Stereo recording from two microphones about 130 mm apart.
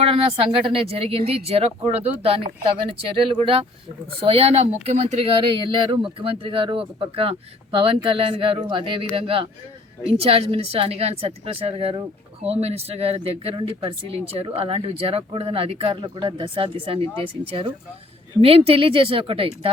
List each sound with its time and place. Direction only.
0.0 s speech: 45° right (ahead or behind)
4.0 s speech: 45° right (ahead or behind)